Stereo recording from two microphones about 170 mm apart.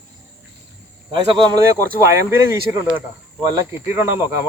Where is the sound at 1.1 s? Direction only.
30° right (ahead or behind).